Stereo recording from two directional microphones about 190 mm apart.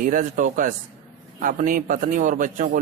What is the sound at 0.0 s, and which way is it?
A man's voice, 45° right (ahead or behind).